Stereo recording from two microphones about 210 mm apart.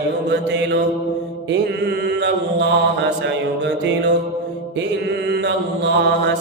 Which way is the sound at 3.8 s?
55° right (ahead or behind).